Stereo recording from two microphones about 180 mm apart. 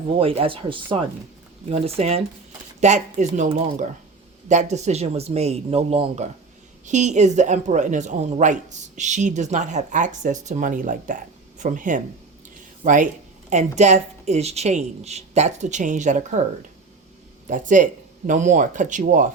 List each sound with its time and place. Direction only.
0.2 s a woman's voice: 30° right (ahead or behind)